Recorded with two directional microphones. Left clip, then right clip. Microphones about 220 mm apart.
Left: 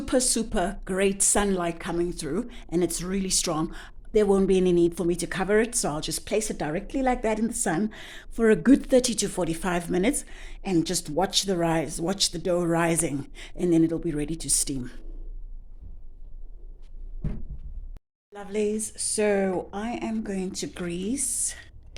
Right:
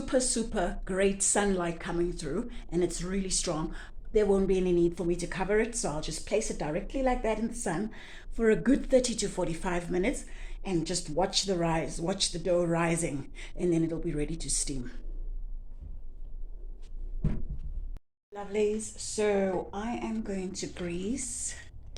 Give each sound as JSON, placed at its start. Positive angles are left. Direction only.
{"t": 0.0, "sound": "a woman's voice", "side_deg": 50}
{"t": 18.3, "sound": "a woman's voice", "side_deg": 35}